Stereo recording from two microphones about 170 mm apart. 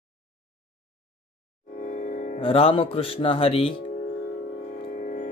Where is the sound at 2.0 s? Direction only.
45° left (ahead or behind).